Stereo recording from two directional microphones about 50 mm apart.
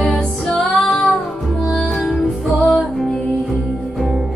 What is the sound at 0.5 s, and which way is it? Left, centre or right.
Music, centre.